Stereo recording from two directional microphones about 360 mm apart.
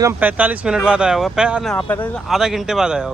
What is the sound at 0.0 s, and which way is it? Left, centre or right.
Speech, centre.